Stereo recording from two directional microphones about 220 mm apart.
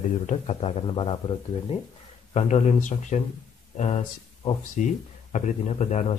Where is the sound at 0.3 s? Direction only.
30° left (ahead or behind).